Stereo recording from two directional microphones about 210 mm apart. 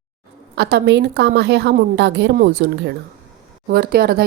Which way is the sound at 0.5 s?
50° right (ahead or behind).